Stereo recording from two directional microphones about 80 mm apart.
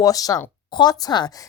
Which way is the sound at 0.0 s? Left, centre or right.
Left.